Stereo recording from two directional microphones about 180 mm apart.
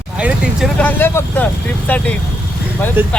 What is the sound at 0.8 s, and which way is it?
Speech, 10° left (ahead or behind).